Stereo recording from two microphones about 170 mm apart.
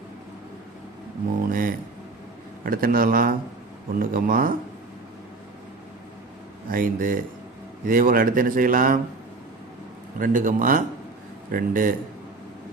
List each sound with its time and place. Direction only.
1.5 s a sound: 55° right (ahead or behind)
2.6 s a man's voice: 55° right (ahead or behind)
6.7 s a man's voice: 55° right (ahead or behind)
10.2 s a man's voice: 55° right (ahead or behind)